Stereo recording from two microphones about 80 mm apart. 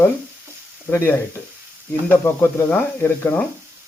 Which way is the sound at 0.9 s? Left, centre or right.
Left.